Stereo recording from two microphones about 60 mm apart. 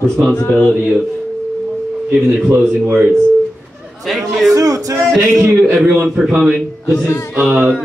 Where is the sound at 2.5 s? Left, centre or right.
Right.